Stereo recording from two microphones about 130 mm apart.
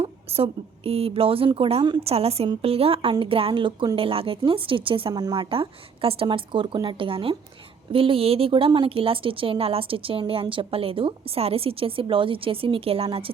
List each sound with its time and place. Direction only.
0.0 s speech: 50° right (ahead or behind)
2.0 s speech: 50° right (ahead or behind)